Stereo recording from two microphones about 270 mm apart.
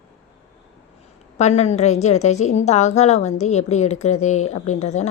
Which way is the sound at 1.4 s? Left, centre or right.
Left.